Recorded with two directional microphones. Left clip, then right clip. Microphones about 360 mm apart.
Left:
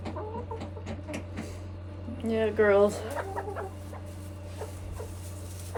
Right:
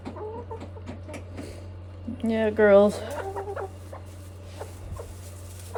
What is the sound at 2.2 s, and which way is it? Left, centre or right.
Speech, right.